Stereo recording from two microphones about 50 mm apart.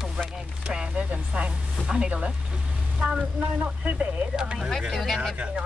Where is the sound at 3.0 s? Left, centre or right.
Centre.